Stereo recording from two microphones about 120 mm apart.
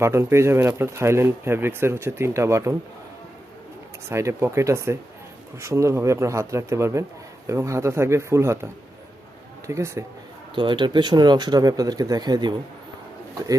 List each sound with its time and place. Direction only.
0.0 s speech: 20° right (ahead or behind)
4.1 s speech: 25° right (ahead or behind)
10.5 s speech: 40° right (ahead or behind)